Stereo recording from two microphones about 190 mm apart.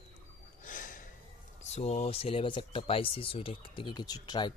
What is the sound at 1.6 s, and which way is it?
Speech, 35° left (ahead or behind).